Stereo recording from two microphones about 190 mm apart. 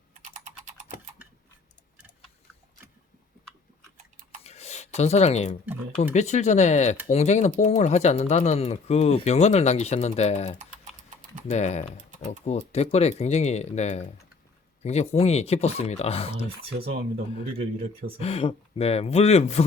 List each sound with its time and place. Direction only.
4.4 s a sound: 35° left (ahead or behind)
6.1 s speech: 35° left (ahead or behind)
18.2 s speech: 30° left (ahead or behind)